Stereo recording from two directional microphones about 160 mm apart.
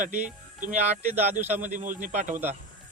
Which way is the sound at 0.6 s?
50° right (ahead or behind).